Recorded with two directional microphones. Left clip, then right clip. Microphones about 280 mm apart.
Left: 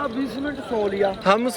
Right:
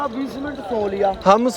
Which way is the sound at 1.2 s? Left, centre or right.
Centre.